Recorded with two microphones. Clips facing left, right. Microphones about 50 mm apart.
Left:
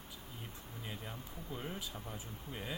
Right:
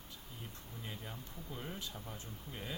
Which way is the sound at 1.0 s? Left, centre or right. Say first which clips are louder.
Left 1 dB; centre.